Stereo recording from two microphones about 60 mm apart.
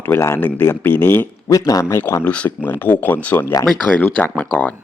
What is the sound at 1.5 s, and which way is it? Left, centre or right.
Speech, left.